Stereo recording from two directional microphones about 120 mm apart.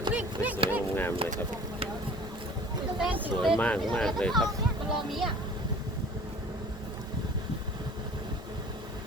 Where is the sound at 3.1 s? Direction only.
15° right (ahead or behind).